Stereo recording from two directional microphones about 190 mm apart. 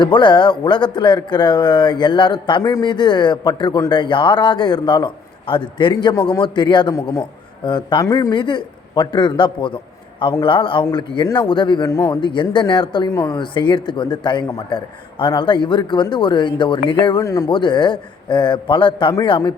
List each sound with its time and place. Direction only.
0.0 s a man's voice: 25° left (ahead or behind)